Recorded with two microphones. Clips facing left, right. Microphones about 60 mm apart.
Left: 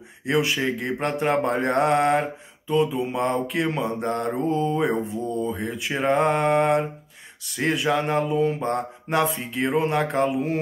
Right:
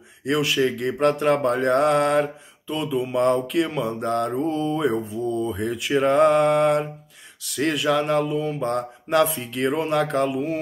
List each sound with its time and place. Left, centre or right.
0.2 s mantra: left
5.4 s mantra: centre
10.3 s mantra: left